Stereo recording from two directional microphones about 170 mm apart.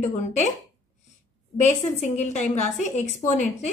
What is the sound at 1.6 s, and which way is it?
A woman's voice, 45° left (ahead or behind).